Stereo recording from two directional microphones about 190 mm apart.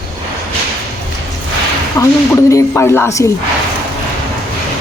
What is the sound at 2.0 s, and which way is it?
Speech, 15° left (ahead or behind).